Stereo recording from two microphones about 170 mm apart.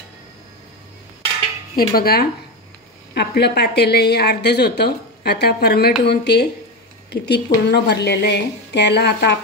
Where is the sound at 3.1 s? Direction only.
75° left (ahead or behind).